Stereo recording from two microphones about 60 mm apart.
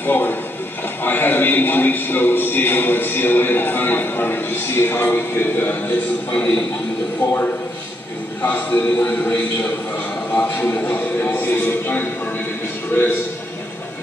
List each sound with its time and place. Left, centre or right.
0.0 s a sound: left
7.2 s a man's voice: left
11.2 s a man's voice: left